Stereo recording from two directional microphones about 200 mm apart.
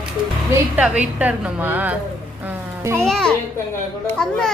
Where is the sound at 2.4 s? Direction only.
10° right (ahead or behind).